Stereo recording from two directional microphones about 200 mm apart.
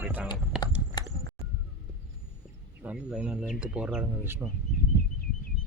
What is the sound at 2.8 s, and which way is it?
Speech, 5° right (ahead or behind).